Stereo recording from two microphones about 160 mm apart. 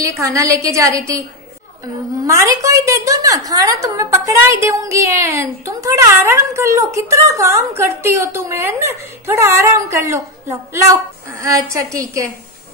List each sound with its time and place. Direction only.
0.0 s a woman's voice: 20° right (ahead or behind)